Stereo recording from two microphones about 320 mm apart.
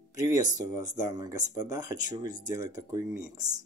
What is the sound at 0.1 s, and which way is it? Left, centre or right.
Speech, centre.